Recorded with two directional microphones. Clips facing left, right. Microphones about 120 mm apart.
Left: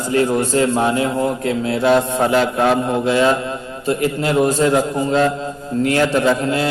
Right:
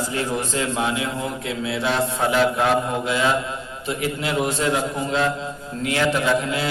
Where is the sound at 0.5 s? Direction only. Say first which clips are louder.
Left 7 dB; 40° left (ahead or behind).